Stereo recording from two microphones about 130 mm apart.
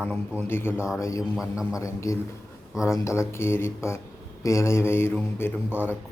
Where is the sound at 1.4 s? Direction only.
5° right (ahead or behind).